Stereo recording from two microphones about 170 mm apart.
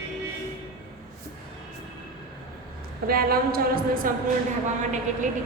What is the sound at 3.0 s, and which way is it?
A woman's voice, 60° right (ahead or behind).